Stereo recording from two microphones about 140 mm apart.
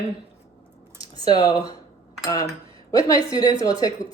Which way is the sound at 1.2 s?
30° left (ahead or behind).